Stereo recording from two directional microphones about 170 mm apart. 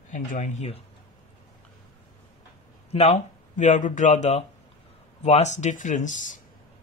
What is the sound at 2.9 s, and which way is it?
Speech, 40° left (ahead or behind).